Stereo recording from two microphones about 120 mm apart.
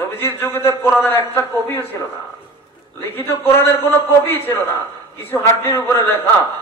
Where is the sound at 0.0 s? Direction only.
15° left (ahead or behind).